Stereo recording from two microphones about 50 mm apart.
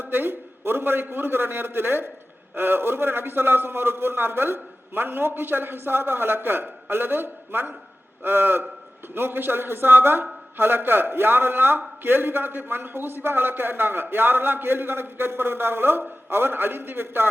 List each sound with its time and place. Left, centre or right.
0.0 s a man's voice: right